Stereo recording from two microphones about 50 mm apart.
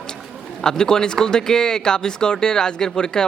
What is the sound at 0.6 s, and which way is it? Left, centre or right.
Speech, centre.